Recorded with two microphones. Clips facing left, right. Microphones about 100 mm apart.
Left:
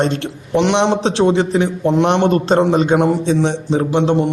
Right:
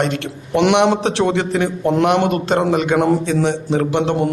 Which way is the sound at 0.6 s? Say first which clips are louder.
Right 1 dB; 5° right (ahead or behind).